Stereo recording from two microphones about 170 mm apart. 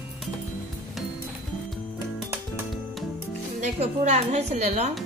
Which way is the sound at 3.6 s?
45° right (ahead or behind).